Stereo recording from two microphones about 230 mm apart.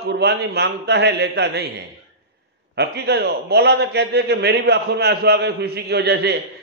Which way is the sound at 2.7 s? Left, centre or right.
Right.